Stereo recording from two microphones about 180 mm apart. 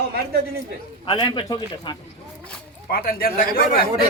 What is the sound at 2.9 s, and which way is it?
Speech, 55° left (ahead or behind).